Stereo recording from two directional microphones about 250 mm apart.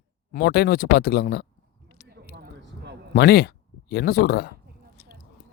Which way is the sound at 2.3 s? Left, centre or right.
Right.